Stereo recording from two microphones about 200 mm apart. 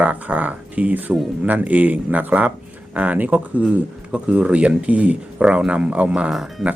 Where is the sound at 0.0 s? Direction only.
5° right (ahead or behind).